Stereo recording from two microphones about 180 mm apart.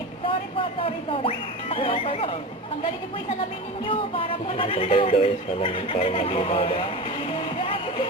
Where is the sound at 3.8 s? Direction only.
30° left (ahead or behind).